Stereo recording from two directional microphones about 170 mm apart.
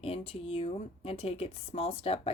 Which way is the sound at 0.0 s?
35° left (ahead or behind).